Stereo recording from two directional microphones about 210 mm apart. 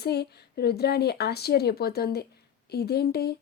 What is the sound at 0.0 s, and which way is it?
A woman's voice, 50° left (ahead or behind).